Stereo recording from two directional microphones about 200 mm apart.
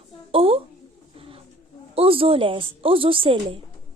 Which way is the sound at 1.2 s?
30° right (ahead or behind).